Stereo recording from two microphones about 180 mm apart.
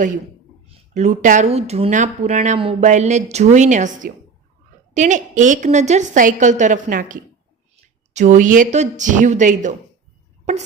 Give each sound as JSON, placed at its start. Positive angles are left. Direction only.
{"t": 0.7, "sound": "a woman's voice", "side_deg": -40}